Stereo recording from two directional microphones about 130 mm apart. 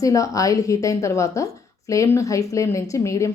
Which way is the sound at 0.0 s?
25° left (ahead or behind).